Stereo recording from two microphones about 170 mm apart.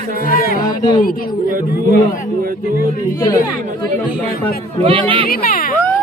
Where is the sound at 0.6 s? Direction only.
25° left (ahead or behind).